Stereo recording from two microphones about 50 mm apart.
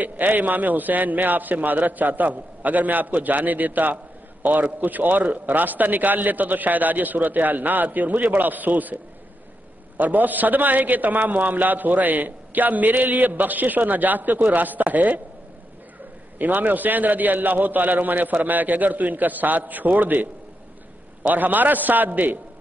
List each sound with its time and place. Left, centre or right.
0.0 s a man's voice: right
16.3 s a man's voice: right